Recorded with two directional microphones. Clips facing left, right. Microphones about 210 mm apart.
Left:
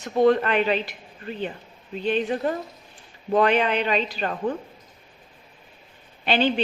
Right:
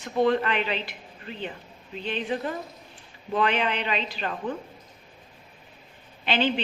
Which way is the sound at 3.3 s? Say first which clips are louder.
Left 5 dB; 45° left (ahead or behind).